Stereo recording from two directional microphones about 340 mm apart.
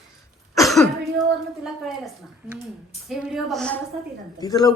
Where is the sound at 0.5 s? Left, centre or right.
Centre.